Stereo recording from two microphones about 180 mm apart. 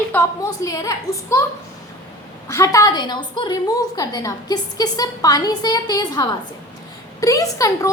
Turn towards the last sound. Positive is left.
turn(degrees=20)  # may be behind; listen again after turning